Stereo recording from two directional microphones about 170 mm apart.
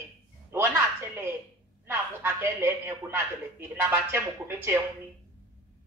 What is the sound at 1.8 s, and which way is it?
Speech, 15° right (ahead or behind).